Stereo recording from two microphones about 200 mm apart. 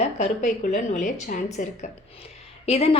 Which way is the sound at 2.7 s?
30° left (ahead or behind).